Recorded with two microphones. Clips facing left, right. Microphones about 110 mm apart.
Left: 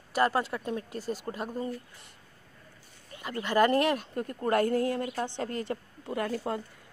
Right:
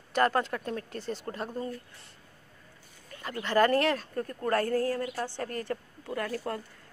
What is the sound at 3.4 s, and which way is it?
A woman's voice, 15° left (ahead or behind).